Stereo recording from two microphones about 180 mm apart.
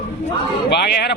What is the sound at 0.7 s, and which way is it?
Speech, 65° left (ahead or behind).